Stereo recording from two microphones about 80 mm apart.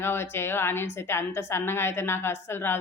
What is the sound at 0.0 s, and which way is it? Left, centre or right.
A woman's voice, left.